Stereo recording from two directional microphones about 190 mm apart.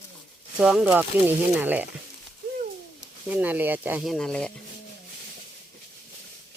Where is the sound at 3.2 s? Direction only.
10° right (ahead or behind).